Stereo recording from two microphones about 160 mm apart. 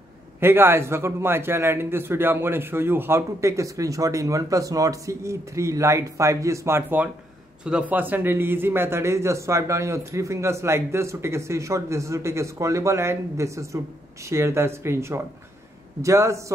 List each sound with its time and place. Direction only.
0.4 s a man's voice: 15° right (ahead or behind)